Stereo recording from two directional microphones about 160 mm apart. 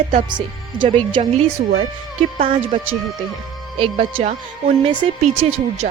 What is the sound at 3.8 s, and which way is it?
Speech, 35° right (ahead or behind).